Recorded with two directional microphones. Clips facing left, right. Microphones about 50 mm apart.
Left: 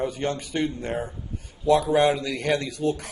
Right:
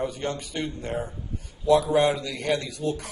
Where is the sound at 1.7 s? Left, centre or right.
Left.